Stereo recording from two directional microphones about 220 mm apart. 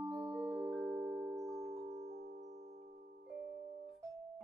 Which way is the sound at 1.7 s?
30° right (ahead or behind).